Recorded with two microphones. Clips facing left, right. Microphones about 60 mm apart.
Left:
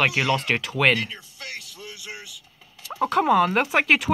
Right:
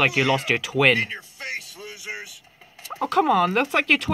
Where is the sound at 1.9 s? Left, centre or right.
Right.